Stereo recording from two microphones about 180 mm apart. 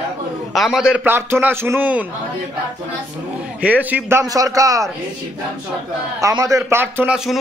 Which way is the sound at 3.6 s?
10° right (ahead or behind).